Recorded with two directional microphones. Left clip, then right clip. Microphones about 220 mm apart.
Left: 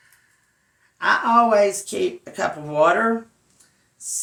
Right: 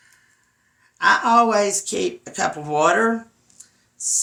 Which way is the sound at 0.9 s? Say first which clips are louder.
Right 2 dB; 40° right (ahead or behind).